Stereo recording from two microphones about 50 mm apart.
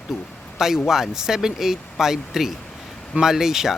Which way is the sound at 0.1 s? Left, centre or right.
Centre.